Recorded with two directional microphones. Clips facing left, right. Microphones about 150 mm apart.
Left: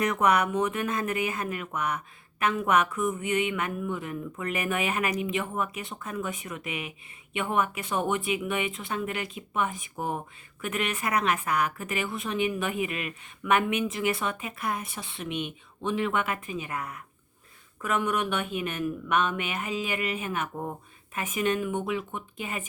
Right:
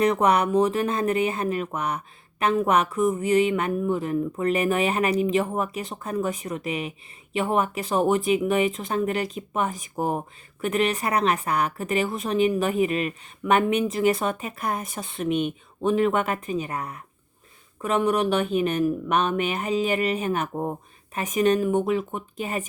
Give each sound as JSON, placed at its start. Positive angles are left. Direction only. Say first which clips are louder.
{"t": 0.0, "sound": "a woman's voice", "louder": "right 4 dB", "side_deg": -30}